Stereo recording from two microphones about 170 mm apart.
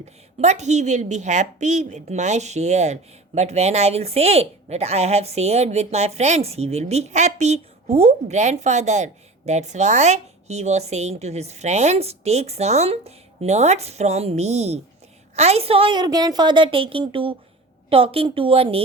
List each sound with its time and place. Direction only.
0.3 s a woman's voice: 40° right (ahead or behind)